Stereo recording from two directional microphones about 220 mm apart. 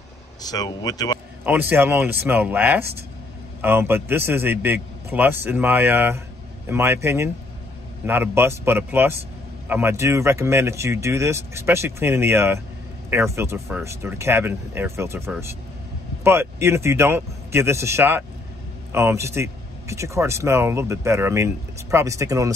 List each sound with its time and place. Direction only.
0.4 s speech: 15° left (ahead or behind)
1.4 s speech: 10° right (ahead or behind)